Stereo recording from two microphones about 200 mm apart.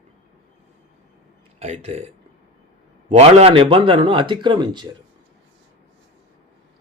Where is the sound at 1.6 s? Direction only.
35° right (ahead or behind).